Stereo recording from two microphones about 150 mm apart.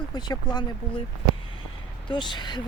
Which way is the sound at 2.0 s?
30° left (ahead or behind).